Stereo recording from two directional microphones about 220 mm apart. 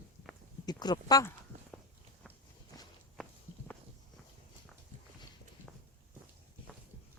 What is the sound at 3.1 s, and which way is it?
Walk, centre (ahead or behind).